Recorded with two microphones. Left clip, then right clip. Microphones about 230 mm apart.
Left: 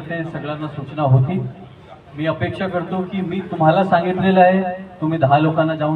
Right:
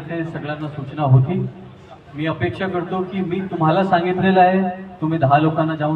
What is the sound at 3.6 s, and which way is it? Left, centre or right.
A man's voice, left.